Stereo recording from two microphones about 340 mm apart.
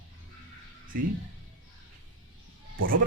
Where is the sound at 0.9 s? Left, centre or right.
Right.